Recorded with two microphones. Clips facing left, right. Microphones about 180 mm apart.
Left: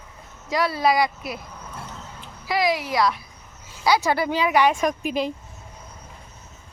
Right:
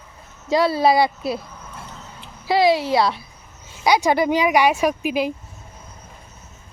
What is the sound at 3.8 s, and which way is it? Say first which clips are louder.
Speech: right 3 dB; 15° right (ahead or behind).